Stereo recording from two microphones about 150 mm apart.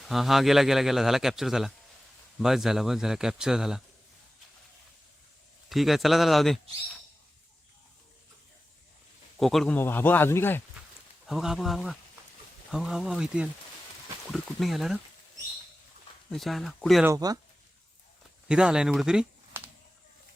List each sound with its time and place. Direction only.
0.0 s speech: centre (ahead or behind)
5.6 s speech: centre (ahead or behind)
9.4 s speech: centre (ahead or behind)
9.7 s speech: 15° left (ahead or behind)
11.3 s speech: centre (ahead or behind)
16.3 s speech: centre (ahead or behind)
17.2 s speech: 25° right (ahead or behind)
18.4 s speech: 5° right (ahead or behind)